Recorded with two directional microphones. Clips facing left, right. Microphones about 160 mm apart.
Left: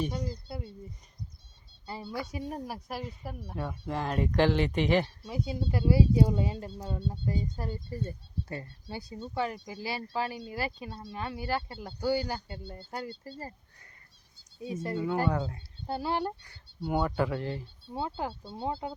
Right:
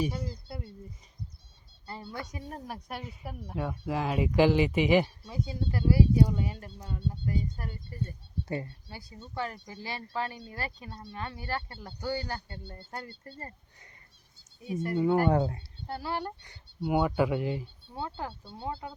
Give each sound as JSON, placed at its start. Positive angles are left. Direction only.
{"t": 0.0, "sound": "speech", "side_deg": -5}
{"t": 0.3, "sound": "a sound", "side_deg": 0}
{"t": 1.9, "sound": "speech", "side_deg": 10}
{"t": 5.3, "sound": "speech", "side_deg": 10}
{"t": 8.4, "sound": "speech", "side_deg": -20}
{"t": 8.9, "sound": "speech", "side_deg": 20}
{"t": 14.6, "sound": "speech", "side_deg": 25}
{"t": 14.9, "sound": "speech", "side_deg": -25}
{"t": 15.9, "sound": "speech", "side_deg": 20}
{"t": 16.8, "sound": "speech", "side_deg": -10}
{"t": 17.9, "sound": "speech", "side_deg": 10}
{"t": 18.6, "sound": "speech", "side_deg": 30}